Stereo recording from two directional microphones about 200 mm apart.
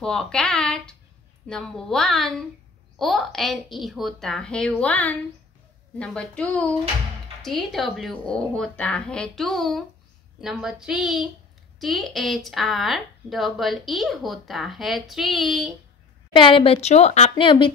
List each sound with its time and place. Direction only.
0.0 s speech: 5° left (ahead or behind)
16.3 s speech: 25° left (ahead or behind)